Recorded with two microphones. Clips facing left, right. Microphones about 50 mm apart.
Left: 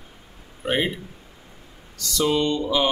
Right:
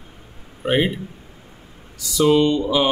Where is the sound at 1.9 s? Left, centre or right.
Centre.